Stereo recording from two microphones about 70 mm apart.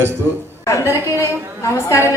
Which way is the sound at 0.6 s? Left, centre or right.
Left.